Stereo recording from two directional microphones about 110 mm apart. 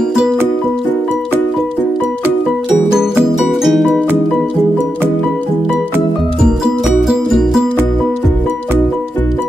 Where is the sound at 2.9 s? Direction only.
5° right (ahead or behind).